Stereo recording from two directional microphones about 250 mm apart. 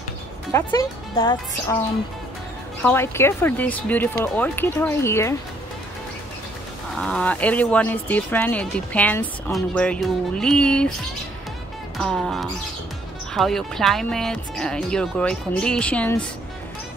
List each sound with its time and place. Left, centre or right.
0.5 s speech: centre
2.8 s speech: centre
7.0 s speech: centre
12.0 s speech: centre